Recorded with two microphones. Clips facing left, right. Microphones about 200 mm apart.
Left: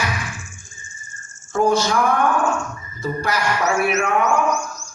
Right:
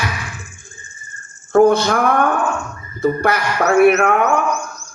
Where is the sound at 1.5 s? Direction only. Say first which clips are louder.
Right 6 dB; 60° right (ahead or behind).